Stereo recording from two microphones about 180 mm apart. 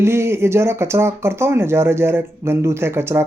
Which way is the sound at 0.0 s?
15° right (ahead or behind).